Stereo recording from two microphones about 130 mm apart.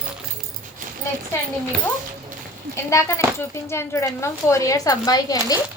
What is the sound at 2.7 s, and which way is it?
A woman's voice, 20° left (ahead or behind).